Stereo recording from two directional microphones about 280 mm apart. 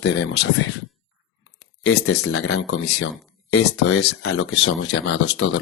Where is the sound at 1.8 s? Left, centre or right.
Left.